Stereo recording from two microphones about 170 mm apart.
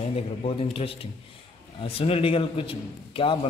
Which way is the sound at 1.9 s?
35° left (ahead or behind).